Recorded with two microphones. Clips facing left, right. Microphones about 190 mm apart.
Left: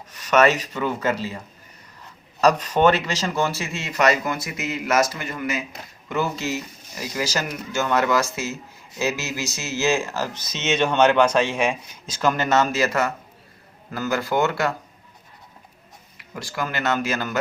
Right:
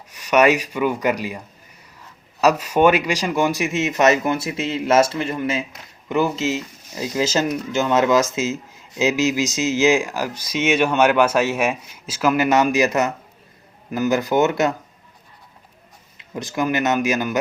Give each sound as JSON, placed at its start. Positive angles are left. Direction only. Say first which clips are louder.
{"t": 0.1, "sound": "speech", "louder": "right 2 dB", "side_deg": -10}
{"t": 2.4, "sound": "speech", "louder": "right 2 dB", "side_deg": -10}
{"t": 6.1, "sound": "speech", "louder": "right 5 dB", "side_deg": -15}
{"t": 16.1, "sound": "speech", "louder": "right 6 dB", "side_deg": -20}